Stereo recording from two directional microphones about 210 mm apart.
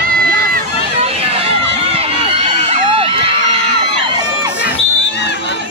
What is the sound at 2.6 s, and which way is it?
Crowd, 25° right (ahead or behind).